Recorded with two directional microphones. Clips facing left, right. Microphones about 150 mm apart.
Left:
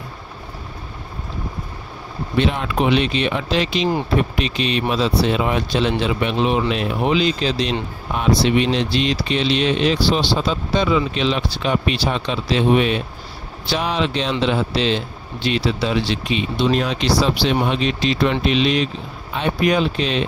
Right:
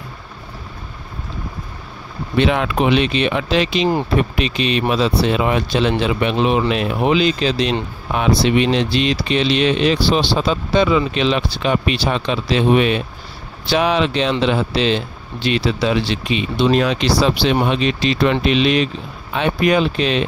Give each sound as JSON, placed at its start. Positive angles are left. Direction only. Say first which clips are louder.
{"t": 2.3, "sound": "speech", "louder": "right 3 dB", "side_deg": -85}